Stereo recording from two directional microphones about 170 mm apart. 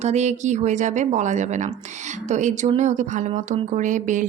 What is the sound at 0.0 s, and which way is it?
A woman's voice, 40° right (ahead or behind).